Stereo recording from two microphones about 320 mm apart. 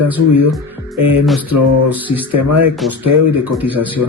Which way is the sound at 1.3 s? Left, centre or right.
Centre.